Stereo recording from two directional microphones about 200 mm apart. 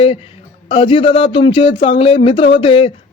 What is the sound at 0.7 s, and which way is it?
Speech, 25° left (ahead or behind).